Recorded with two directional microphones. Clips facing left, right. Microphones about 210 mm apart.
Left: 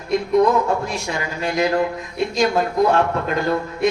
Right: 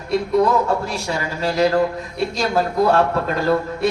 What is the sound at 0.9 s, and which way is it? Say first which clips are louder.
A man's voice: right 1 dB; 35° right (ahead or behind).